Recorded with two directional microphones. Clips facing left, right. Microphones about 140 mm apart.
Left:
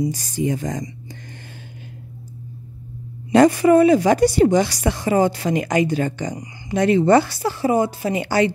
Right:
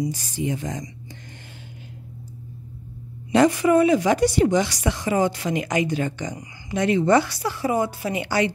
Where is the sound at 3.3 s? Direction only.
40° left (ahead or behind).